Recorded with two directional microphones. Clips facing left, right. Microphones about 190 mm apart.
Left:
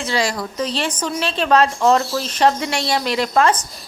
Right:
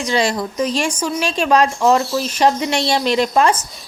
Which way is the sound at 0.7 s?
10° right (ahead or behind).